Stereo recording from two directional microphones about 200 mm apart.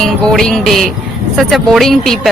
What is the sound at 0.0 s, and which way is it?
Speech, centre (ahead or behind).